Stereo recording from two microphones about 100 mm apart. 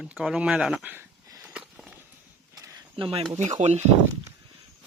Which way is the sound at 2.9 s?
65° right (ahead or behind).